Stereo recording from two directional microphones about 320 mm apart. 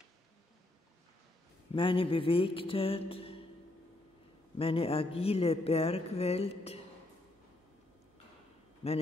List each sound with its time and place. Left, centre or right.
1.7 s speech: centre
4.6 s speech: centre
8.8 s speech: centre